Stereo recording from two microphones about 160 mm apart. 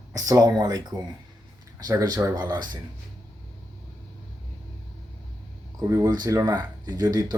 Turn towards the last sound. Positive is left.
turn(degrees=-25)  # may be behind; listen again after turning